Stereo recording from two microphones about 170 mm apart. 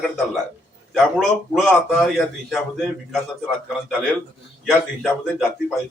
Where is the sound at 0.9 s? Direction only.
Centre (ahead or behind).